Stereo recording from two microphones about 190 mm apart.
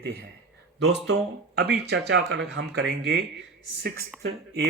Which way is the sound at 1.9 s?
60° right (ahead or behind).